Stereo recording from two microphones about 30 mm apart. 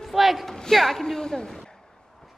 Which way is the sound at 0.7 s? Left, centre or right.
Centre.